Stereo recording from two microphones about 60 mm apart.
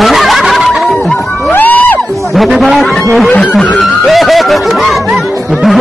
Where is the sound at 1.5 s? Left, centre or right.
Left.